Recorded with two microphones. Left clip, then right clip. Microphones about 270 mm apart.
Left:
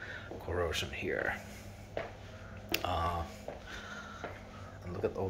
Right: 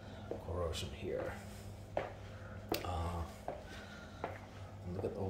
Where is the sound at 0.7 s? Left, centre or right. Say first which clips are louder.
Left 7 dB; centre.